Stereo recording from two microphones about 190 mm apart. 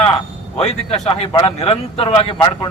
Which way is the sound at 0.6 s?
35° left (ahead or behind).